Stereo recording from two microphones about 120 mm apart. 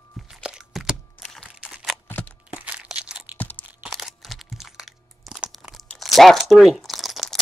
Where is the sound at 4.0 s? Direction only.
Centre (ahead or behind).